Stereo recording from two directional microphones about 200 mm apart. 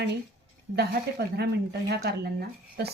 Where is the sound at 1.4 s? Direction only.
55° right (ahead or behind).